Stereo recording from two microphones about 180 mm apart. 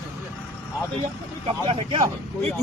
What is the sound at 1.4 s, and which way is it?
Speech, 30° right (ahead or behind).